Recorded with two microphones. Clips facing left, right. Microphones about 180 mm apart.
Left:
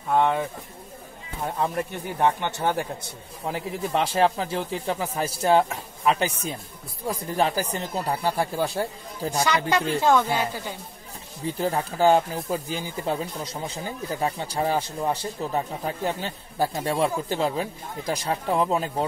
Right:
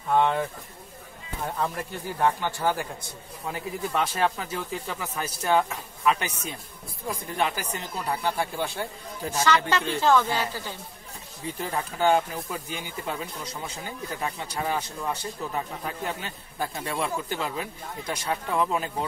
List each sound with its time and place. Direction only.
0.1 s speech: 5° left (ahead or behind)
1.6 s speech: 20° left (ahead or behind)
9.4 s speech: 15° left (ahead or behind)
11.6 s speech: 35° left (ahead or behind)